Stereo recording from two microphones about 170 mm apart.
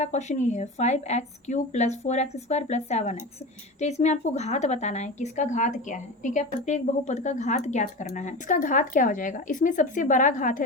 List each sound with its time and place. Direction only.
0.0 s a woman's voice: 45° left (ahead or behind)